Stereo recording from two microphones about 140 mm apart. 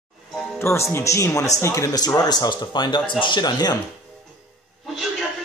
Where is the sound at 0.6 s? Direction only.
20° left (ahead or behind).